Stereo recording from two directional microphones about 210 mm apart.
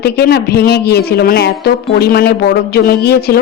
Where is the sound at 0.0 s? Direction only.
50° left (ahead or behind).